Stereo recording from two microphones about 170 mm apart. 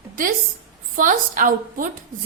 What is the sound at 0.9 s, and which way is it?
Speech, 50° right (ahead or behind).